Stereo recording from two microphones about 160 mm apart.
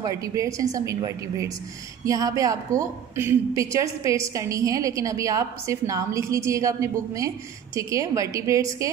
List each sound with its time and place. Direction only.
0.0 s a woman's voice: 20° right (ahead or behind)